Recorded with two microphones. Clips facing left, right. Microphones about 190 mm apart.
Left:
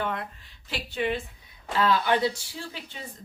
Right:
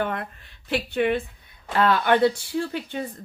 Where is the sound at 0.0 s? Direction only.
55° right (ahead or behind).